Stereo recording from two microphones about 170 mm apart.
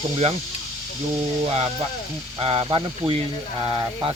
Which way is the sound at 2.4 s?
35° right (ahead or behind).